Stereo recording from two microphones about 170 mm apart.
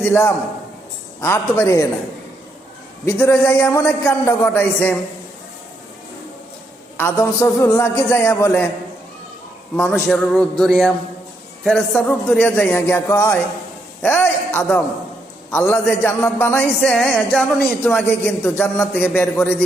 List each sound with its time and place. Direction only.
0.0 s a man's voice: 10° left (ahead or behind)
3.1 s a man's voice: 15° left (ahead or behind)
6.9 s a man's voice: 15° left (ahead or behind)
9.9 s a man's voice: 5° left (ahead or behind)